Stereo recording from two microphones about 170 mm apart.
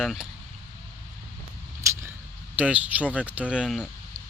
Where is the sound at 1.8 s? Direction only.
15° right (ahead or behind).